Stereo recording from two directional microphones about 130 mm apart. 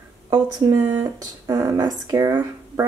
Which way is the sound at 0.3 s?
30° right (ahead or behind).